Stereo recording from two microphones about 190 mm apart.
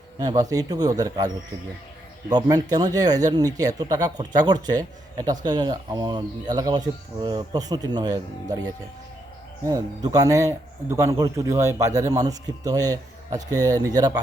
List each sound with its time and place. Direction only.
0.2 s speech: 20° right (ahead or behind)
2.3 s speech: 20° right (ahead or behind)
9.6 s a man's voice: 20° right (ahead or behind)